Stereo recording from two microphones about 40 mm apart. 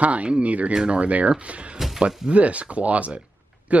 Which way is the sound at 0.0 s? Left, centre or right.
Right.